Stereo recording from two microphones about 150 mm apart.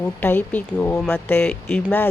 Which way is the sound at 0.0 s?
15° left (ahead or behind).